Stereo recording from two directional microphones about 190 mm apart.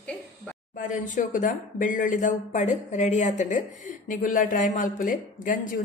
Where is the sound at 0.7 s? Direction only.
45° left (ahead or behind).